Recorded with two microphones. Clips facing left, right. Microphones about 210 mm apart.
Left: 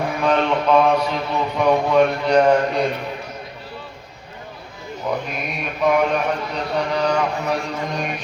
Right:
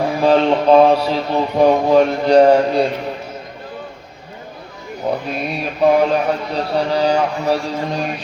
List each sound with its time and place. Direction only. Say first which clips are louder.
0.2 s speech: right 6 dB; 30° right (ahead or behind)
5.3 s speech: right 5 dB; 30° right (ahead or behind)